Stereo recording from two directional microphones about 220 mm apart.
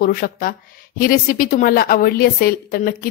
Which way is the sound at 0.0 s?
40° left (ahead or behind).